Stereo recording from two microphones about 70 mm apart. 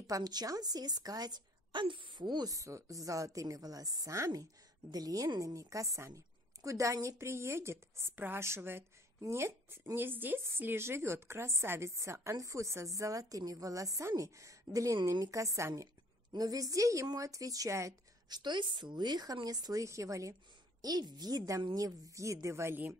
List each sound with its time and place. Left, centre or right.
0.0 s a woman's voice: right
2.5 s a woman's voice: right
16.3 s a woman's voice: right
18.3 s a woman's voice: right
20.8 s a woman's voice: right
21.5 s a woman's voice: right